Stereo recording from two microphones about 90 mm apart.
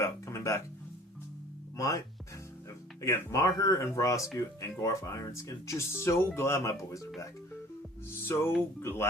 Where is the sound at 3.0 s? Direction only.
35° left (ahead or behind).